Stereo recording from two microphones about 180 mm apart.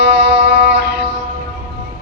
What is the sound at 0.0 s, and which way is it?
Music, 75° right (ahead or behind).